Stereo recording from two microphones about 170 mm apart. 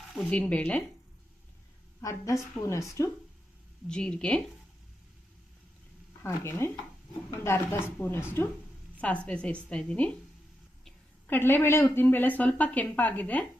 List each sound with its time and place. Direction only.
0.1 s speech: 5° left (ahead or behind)
2.0 s speech: 20° left (ahead or behind)
3.8 s speech: 5° left (ahead or behind)
6.2 s speech: 15° left (ahead or behind)
11.3 s speech: 15° left (ahead or behind)